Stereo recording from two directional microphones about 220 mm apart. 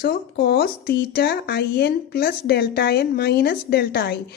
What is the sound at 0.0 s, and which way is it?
A woman's voice, 45° left (ahead or behind).